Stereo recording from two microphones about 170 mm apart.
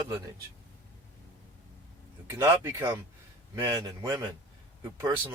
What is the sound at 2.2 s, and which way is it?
Speech, 15° right (ahead or behind).